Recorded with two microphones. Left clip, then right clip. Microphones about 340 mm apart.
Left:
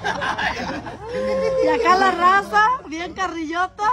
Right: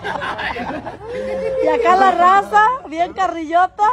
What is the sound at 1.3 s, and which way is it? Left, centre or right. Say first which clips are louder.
Speech: even; left.